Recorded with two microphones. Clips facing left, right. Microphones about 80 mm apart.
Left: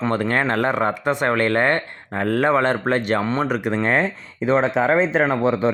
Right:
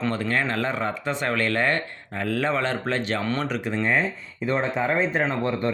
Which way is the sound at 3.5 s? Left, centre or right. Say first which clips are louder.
Left 4 dB; left.